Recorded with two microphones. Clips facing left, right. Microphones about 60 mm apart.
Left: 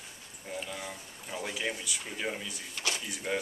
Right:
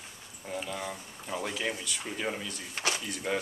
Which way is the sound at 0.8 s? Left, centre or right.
Right.